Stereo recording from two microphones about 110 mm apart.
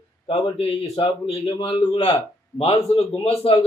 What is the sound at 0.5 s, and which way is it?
Speech, 60° left (ahead or behind).